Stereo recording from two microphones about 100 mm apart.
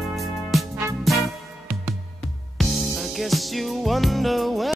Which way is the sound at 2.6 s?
Centre (ahead or behind).